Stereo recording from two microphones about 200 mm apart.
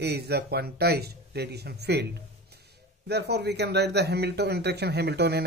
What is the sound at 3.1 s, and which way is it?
Speech, 55° right (ahead or behind).